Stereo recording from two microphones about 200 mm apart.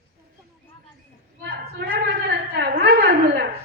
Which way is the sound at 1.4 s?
50° right (ahead or behind).